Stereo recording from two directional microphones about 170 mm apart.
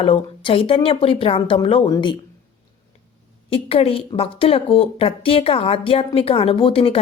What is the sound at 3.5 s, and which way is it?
A woman's voice, 35° left (ahead or behind).